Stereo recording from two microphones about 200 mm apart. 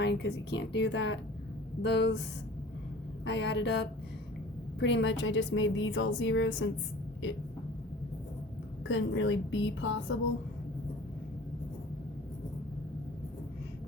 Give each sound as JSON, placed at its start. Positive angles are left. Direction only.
{"t": 0.0, "sound": "a woman's voice", "side_deg": 55}
{"t": 3.2, "sound": "a woman's voice", "side_deg": 60}
{"t": 8.9, "sound": "a woman's voice", "side_deg": 70}